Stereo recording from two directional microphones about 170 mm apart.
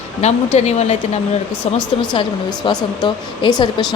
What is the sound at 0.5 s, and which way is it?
Speech, 40° left (ahead or behind).